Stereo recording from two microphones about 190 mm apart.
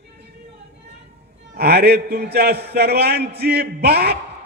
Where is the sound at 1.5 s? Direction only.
55° right (ahead or behind).